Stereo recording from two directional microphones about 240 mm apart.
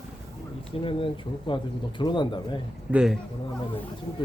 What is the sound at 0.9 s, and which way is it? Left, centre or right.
Speech, left.